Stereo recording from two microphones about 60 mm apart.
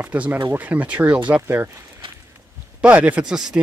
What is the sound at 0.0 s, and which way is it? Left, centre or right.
Speech, right.